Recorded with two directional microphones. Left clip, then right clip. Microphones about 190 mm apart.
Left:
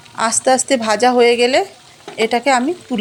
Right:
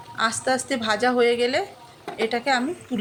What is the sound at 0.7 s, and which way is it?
A woman's voice, 40° left (ahead or behind).